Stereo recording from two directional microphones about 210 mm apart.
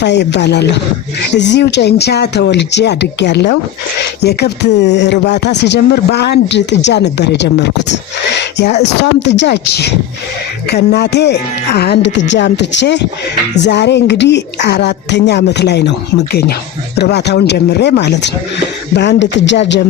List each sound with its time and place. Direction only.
0.0 s speech: 55° left (ahead or behind)